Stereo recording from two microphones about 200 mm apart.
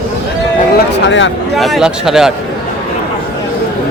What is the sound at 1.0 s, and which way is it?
Speech, 65° left (ahead or behind).